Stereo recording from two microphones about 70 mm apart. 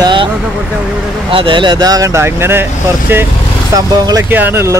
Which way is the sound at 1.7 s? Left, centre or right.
Right.